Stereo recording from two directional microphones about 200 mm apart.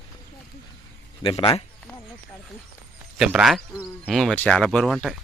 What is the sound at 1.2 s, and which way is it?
Speech, 25° left (ahead or behind).